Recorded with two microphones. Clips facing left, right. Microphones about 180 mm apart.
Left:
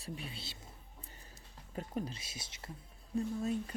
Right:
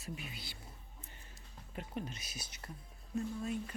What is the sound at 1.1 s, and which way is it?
Music, 35° left (ahead or behind).